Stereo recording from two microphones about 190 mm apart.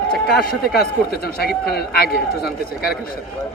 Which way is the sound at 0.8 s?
55° left (ahead or behind).